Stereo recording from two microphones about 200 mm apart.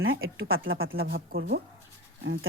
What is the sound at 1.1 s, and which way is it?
Speech, 50° right (ahead or behind).